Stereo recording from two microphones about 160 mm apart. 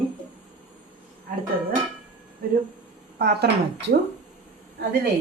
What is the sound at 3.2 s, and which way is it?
Speech, 80° right.